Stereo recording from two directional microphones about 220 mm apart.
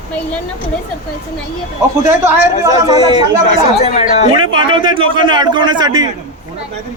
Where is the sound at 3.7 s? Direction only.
30° left (ahead or behind).